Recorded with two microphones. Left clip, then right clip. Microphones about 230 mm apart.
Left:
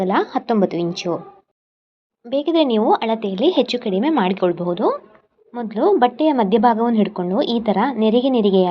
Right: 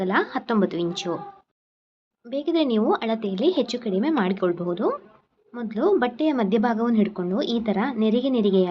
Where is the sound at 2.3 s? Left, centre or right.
Centre.